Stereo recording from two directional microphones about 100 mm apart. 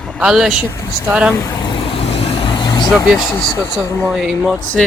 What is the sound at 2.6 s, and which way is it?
Vehicle, 40° left (ahead or behind).